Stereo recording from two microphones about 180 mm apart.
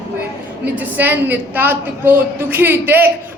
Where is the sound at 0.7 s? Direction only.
10° right (ahead or behind).